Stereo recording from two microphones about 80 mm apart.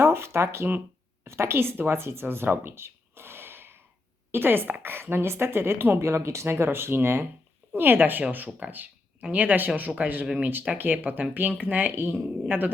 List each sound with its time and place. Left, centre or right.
0.0 s a woman's voice: right